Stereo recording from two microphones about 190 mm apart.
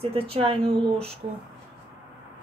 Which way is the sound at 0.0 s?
30° right (ahead or behind).